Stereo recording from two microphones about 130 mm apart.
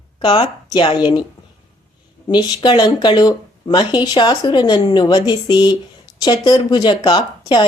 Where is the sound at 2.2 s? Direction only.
35° left (ahead or behind).